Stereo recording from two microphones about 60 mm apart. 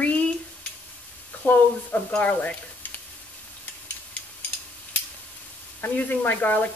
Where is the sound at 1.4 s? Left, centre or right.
Left.